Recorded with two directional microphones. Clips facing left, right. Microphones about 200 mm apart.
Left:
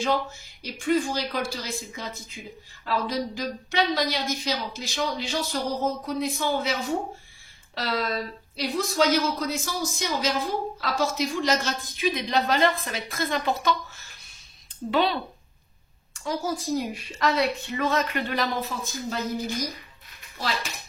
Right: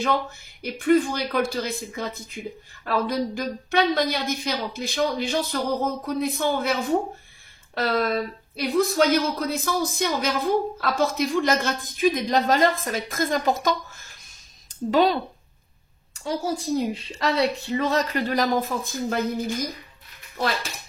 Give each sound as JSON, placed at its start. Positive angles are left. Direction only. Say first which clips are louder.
{"t": 0.0, "sound": "speech", "louder": "right 1 dB", "side_deg": -55}
{"t": 16.3, "sound": "a child's voice", "louder": "right 2 dB", "side_deg": -30}